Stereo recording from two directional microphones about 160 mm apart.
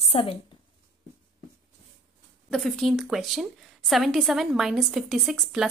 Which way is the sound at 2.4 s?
5° left (ahead or behind).